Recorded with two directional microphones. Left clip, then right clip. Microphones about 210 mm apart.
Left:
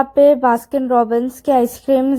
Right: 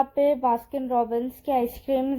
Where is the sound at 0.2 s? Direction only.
35° left (ahead or behind).